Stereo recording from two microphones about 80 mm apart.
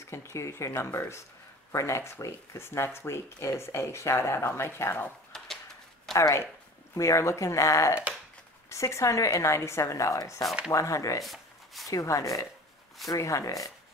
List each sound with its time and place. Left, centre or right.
0.0 s speech: left
5.3 s a sound: centre
6.1 s speech: left
11.2 s shuffling cards: centre
11.9 s speech: left